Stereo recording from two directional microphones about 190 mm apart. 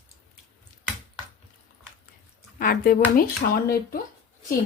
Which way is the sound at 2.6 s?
50° left (ahead or behind).